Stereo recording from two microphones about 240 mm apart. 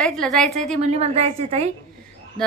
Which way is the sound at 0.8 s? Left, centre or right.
Right.